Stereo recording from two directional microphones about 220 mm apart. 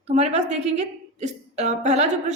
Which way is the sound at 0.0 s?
30° right (ahead or behind).